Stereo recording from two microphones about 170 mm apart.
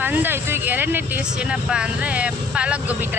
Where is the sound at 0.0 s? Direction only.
10° right (ahead or behind).